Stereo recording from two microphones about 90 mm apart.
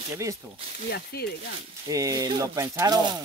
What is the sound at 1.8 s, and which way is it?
Speech, 40° right (ahead or behind).